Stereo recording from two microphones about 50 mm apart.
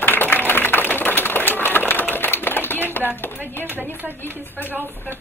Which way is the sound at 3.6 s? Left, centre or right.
Right.